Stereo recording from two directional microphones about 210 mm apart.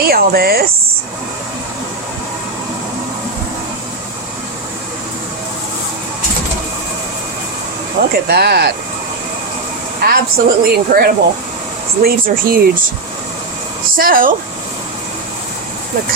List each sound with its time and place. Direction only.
0.0 s a woman's voice: 45° right (ahead or behind)
8.0 s a woman's voice: 45° right (ahead or behind)
10.0 s a woman's voice: 45° right (ahead or behind)
13.9 s speech: 40° right (ahead or behind)